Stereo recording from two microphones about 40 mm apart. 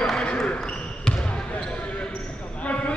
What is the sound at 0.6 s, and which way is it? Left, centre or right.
Basketball bounce, left.